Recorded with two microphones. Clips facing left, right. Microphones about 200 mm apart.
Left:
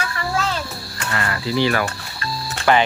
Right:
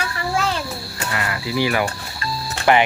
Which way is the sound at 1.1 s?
10° right (ahead or behind).